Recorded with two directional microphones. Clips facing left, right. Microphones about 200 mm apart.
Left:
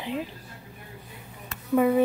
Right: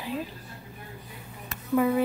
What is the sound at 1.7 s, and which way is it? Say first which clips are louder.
Speech: left 2 dB; 25° left (ahead or behind).